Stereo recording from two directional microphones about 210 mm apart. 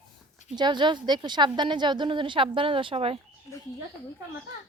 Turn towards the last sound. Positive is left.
turn(degrees=-25)  # may be behind; listen again after turning